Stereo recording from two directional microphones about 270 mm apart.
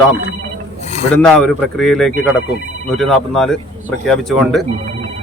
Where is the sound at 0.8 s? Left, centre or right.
Left.